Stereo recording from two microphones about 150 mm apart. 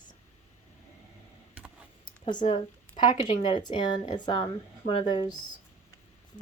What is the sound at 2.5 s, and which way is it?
Speech, 30° left (ahead or behind).